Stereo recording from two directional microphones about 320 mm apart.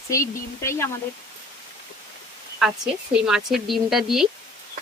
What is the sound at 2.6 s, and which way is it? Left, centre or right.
Speech, centre.